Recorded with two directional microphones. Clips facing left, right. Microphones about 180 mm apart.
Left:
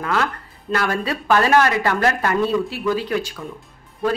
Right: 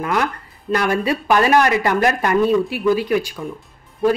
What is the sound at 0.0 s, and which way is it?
A woman's voice, 15° right (ahead or behind).